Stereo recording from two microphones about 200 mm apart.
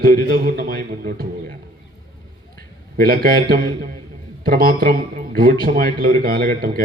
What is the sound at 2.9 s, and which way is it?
A man's voice, 50° right (ahead or behind).